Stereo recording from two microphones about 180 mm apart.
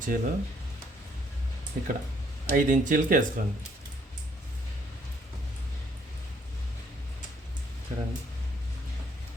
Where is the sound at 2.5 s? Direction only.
50° right (ahead or behind).